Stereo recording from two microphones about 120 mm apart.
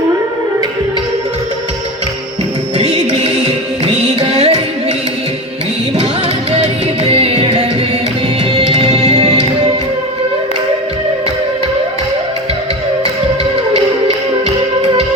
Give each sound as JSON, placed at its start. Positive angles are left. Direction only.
{"t": 2.7, "sound": "music", "side_deg": -50}
{"t": 6.5, "sound": "music", "side_deg": -50}